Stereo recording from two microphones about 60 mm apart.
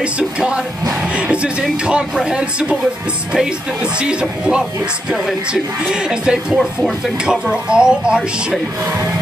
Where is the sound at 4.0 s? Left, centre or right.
Centre.